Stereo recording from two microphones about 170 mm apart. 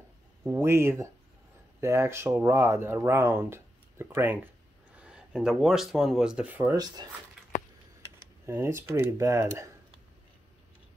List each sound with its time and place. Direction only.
0.4 s speech: 15° right (ahead or behind)
8.5 s speech: 15° right (ahead or behind)